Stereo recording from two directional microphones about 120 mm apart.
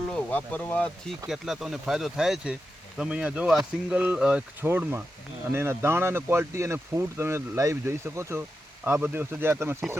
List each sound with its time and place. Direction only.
0.1 s speech: 15° left (ahead or behind)
1.3 s speech: centre (ahead or behind); by 9.7 s 20° right (ahead or behind)